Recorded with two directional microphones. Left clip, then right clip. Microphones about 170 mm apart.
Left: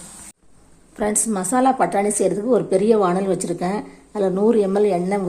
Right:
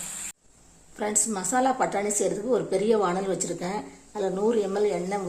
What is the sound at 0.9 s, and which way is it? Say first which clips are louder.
A woman's voice: left 6 dB; 25° left (ahead or behind).